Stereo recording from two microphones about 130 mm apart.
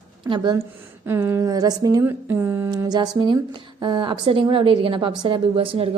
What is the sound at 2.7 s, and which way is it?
A woman's voice, 30° right (ahead or behind).